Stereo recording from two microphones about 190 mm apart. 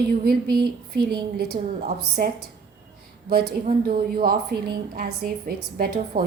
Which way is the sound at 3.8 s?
50° right (ahead or behind).